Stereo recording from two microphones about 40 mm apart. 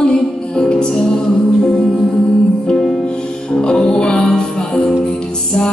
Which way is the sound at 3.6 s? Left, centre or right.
Centre.